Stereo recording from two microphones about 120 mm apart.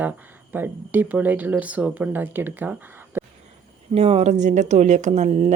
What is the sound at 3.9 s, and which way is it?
Speech, 55° right (ahead or behind).